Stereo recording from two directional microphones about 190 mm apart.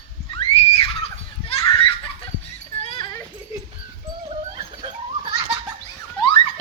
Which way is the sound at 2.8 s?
25° left (ahead or behind).